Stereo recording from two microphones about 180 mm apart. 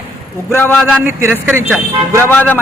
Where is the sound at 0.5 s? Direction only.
10° left (ahead or behind).